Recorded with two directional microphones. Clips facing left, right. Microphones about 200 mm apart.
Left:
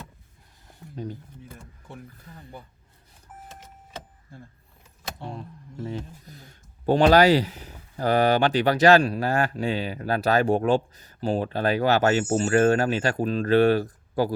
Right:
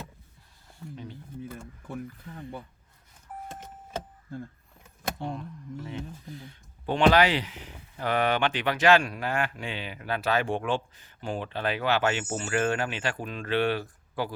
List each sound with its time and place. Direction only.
5.4 s speech: 35° left (ahead or behind)